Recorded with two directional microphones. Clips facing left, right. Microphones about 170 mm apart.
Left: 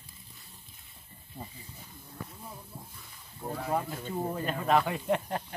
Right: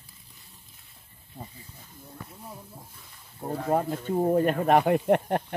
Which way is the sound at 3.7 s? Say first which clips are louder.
Right 8 dB; 45° right (ahead or behind).